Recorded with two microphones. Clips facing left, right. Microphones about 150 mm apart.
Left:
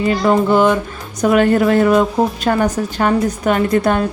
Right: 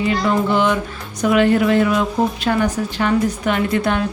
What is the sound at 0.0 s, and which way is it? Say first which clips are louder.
Speech: left 4 dB; 45° left (ahead or behind).